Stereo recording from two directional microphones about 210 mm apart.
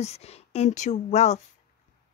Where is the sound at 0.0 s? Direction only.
30° left (ahead or behind).